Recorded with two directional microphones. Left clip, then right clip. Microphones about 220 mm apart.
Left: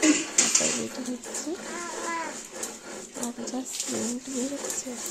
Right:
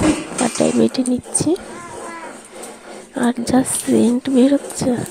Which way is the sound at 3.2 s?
45° right (ahead or behind).